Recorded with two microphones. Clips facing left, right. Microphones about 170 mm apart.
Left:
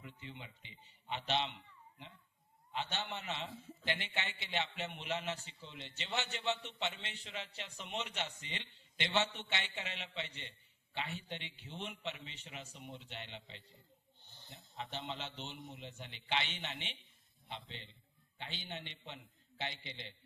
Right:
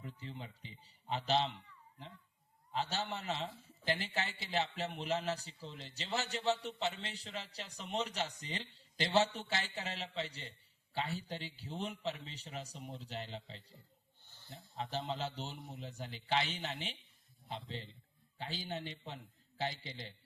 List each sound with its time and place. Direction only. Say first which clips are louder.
0.0 s a man's voice: right 4 dB; 35° right (ahead or behind)
2.7 s a man's voice: right 3 dB; 35° right (ahead or behind)
14.2 s snake: left 1 dB; 20° left (ahead or behind)
14.8 s a man's voice: right 5 dB; 40° right (ahead or behind)